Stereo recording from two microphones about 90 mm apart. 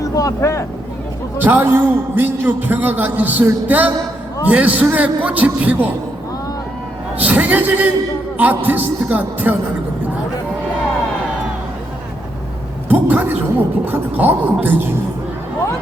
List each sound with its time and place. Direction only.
0.0 s speech: 40° left (ahead or behind)
1.4 s a man's voice: 20° right (ahead or behind)
7.2 s a man's voice: 20° right (ahead or behind)
12.9 s a sound: 20° right (ahead or behind)
13.8 s a man's voice: 20° right (ahead or behind)